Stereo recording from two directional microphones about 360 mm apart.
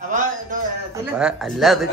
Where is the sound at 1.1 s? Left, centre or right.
Centre.